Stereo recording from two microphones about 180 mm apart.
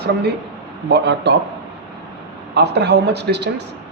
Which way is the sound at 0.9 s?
75° right (ahead or behind).